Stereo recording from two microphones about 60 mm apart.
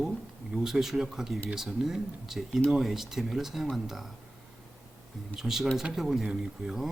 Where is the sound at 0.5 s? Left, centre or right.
Centre.